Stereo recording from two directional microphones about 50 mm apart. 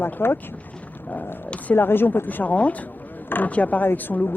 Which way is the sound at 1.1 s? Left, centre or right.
Left.